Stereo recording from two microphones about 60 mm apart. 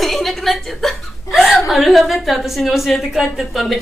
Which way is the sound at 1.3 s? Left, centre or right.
Centre.